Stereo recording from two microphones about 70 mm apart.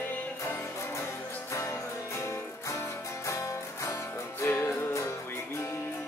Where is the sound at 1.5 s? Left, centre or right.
Left.